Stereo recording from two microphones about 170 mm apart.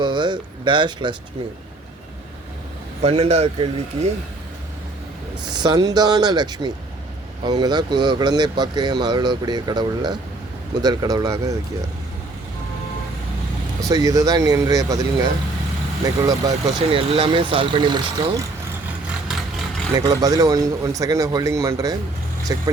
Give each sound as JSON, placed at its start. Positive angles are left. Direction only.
{"t": 0.0, "sound": "speech", "side_deg": -25}
{"t": 3.0, "sound": "speech", "side_deg": -40}
{"t": 5.5, "sound": "speech", "side_deg": -25}
{"t": 13.8, "sound": "speech", "side_deg": -20}
{"t": 16.9, "sound": "speech", "side_deg": -35}
{"t": 20.0, "sound": "speech", "side_deg": -20}